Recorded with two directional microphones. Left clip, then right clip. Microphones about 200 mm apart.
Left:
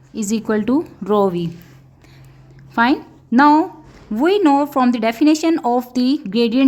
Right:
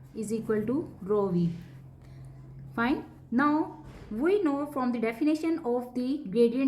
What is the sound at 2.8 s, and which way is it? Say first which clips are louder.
Speech: left 13 dB; 50° left (ahead or behind).